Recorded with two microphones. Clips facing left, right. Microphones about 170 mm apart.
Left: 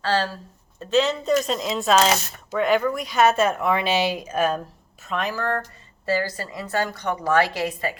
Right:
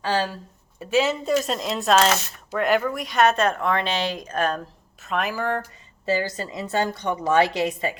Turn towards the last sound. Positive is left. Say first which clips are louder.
# right 2 dB
turn(degrees=-20)  # may be behind; listen again after turning